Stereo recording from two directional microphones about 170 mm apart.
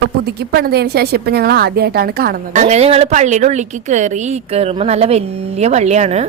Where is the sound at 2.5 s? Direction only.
45° right (ahead or behind).